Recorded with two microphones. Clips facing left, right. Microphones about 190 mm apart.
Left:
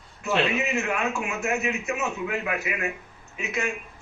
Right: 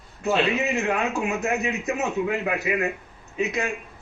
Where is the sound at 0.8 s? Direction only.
35° right (ahead or behind).